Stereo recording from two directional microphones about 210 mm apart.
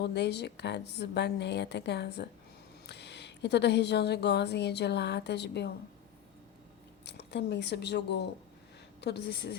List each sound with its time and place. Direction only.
0.0 s a woman's voice: 55° left (ahead or behind)
7.0 s speech: 55° left (ahead or behind)